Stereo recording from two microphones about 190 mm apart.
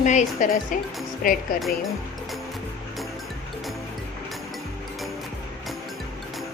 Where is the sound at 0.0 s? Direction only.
40° left (ahead or behind).